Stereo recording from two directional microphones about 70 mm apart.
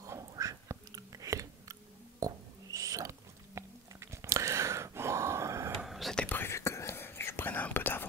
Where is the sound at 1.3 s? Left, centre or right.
Right.